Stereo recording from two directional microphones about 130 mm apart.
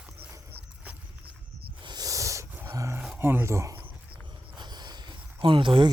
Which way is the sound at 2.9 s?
15° right (ahead or behind).